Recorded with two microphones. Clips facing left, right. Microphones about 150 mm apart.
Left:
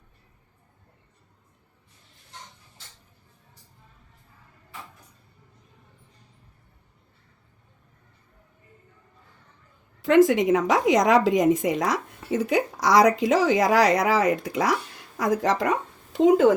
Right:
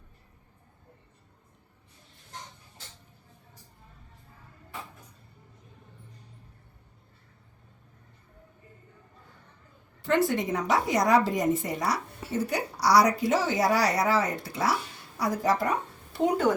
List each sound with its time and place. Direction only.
10.2 s a woman's voice: 90° left